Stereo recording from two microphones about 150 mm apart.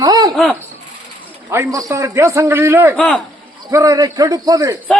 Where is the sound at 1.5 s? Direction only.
20° right (ahead or behind).